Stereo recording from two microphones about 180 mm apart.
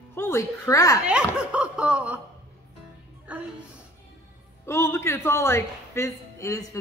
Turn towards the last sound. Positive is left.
turn(degrees=15)  # may be behind; listen again after turning